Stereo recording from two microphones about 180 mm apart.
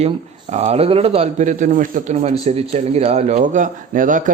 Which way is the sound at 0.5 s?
35° right (ahead or behind).